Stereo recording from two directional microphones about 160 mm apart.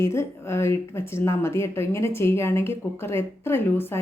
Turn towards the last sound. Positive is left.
turn(degrees=15)  # may be behind; listen again after turning